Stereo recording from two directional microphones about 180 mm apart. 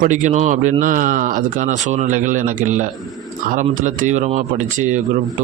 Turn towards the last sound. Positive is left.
turn(degrees=-45)  # may be behind; listen again after turning